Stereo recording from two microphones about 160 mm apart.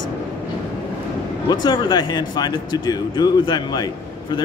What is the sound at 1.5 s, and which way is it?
Speech, 25° left (ahead or behind).